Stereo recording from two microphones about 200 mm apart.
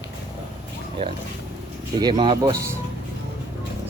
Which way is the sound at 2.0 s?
20° right (ahead or behind).